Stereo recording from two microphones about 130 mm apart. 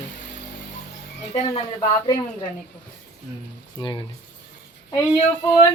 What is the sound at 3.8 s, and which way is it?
Speech, 35° left (ahead or behind).